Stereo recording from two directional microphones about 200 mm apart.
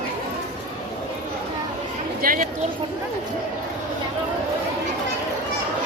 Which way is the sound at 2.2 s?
45° right (ahead or behind).